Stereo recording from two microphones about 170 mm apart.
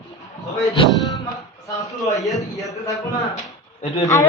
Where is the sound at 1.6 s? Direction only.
20° left (ahead or behind).